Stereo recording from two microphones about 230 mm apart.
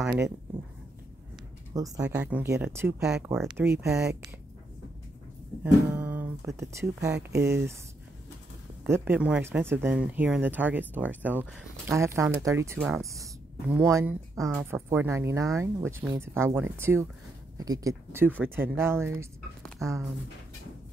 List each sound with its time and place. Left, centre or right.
1.7 s speech: centre
5.6 s speech: centre
7.2 s speech: right
8.8 s speech: centre